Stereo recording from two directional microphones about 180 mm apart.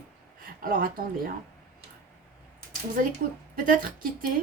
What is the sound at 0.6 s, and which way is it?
Speech, 55° right (ahead or behind).